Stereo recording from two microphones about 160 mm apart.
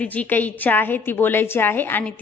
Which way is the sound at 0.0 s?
10° left (ahead or behind).